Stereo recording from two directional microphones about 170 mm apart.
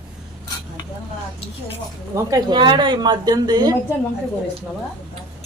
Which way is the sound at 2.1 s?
20° right (ahead or behind).